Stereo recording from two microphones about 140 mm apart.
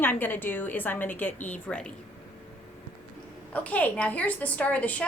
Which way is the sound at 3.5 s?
10° left (ahead or behind).